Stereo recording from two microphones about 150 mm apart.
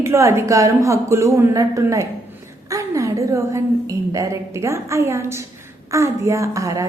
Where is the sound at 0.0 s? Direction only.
20° right (ahead or behind).